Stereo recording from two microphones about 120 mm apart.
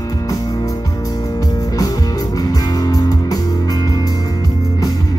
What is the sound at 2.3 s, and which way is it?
Music, 30° left (ahead or behind).